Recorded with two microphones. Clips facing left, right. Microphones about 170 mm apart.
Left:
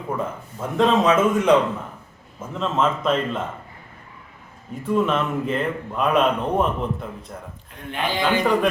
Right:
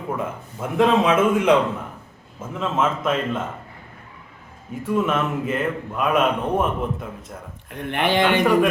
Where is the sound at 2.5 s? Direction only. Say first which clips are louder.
Left 1 dB; 10° right (ahead or behind).